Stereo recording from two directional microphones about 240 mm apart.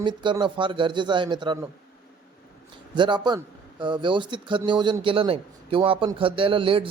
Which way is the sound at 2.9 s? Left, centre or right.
Centre.